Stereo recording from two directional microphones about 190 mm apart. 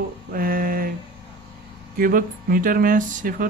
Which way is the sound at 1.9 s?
50° right (ahead or behind).